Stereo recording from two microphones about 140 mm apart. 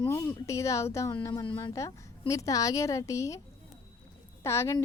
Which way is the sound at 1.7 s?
20° left (ahead or behind).